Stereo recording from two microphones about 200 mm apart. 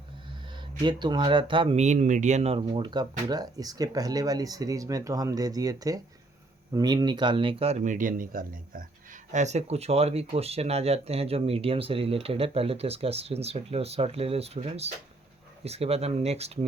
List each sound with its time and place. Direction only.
0.5 s speech: 20° right (ahead or behind)